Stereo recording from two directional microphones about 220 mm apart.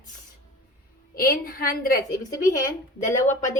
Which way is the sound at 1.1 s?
40° left (ahead or behind).